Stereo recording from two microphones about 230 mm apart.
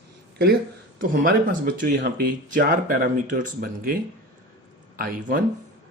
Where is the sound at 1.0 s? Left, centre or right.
Right.